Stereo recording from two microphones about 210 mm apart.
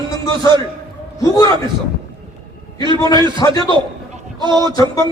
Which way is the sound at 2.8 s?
20° right (ahead or behind).